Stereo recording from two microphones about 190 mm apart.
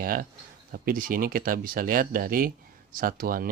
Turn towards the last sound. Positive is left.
turn(degrees=-50)  # may be behind; listen again after turning